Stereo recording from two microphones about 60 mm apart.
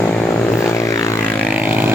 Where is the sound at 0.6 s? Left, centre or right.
Left.